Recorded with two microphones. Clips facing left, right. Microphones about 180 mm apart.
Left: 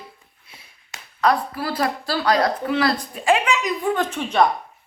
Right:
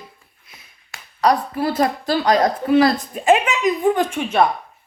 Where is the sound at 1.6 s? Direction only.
20° right (ahead or behind).